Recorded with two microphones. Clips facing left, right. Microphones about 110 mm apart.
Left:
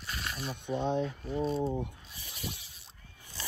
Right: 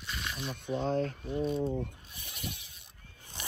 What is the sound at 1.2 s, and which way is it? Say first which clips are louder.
Speech: even; 40° left (ahead or behind).